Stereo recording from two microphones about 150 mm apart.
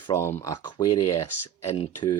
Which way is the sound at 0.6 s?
25° left (ahead or behind).